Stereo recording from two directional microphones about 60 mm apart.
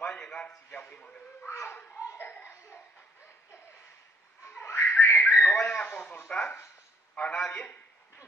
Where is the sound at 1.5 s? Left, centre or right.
Left.